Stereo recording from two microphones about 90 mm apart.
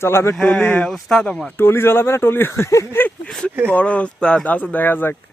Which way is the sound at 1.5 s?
25° left (ahead or behind).